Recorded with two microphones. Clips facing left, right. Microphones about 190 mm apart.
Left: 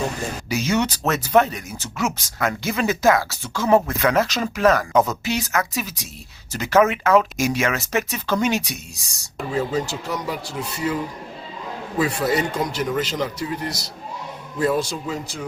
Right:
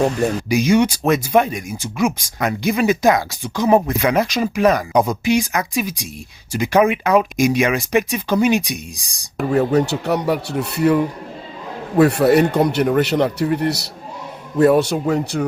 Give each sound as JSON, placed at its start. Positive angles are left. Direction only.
{"t": 0.4, "sound": "speech", "side_deg": -15}
{"t": 9.5, "sound": "speech", "side_deg": -65}